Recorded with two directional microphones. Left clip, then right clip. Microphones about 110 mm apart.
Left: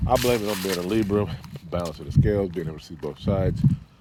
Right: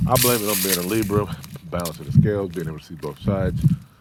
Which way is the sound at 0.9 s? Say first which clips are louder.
Right 1 dB; 25° left (ahead or behind).